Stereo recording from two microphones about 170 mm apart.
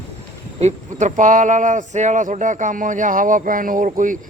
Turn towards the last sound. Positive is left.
turn(degrees=-50)  # may be behind; listen again after turning